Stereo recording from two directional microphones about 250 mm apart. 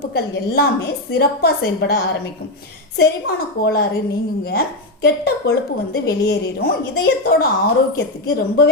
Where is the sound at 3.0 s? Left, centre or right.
Left.